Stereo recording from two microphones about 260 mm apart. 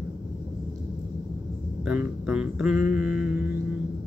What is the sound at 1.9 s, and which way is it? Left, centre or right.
Speech, centre.